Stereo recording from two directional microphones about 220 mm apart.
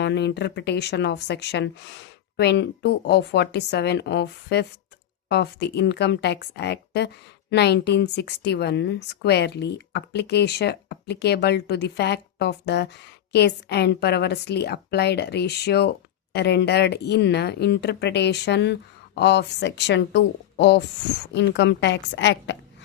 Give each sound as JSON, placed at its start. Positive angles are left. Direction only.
{"t": 0.0, "sound": "a woman's voice", "side_deg": 50}